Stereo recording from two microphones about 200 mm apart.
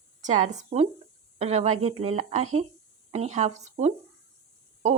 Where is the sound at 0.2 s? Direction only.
35° right (ahead or behind).